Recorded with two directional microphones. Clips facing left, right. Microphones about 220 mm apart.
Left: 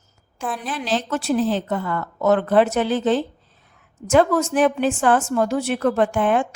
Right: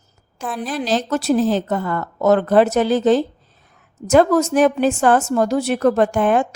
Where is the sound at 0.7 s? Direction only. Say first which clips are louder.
Right 4 dB; 40° right (ahead or behind).